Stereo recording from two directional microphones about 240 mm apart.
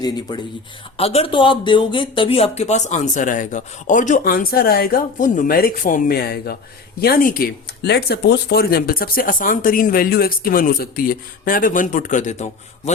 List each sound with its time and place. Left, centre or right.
0.9 s speech: left